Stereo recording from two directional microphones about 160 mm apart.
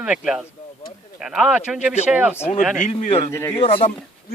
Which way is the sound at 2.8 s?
45° left (ahead or behind).